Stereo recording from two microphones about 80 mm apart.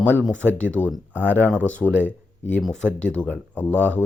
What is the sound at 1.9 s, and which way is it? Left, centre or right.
Speech, right.